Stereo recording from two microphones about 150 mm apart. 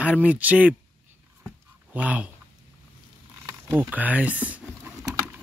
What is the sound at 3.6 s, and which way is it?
Speech, 20° right (ahead or behind).